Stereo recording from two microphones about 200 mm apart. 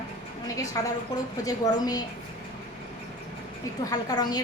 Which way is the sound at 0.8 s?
15° left (ahead or behind).